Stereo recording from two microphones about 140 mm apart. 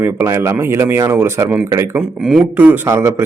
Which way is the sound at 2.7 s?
15° right (ahead or behind).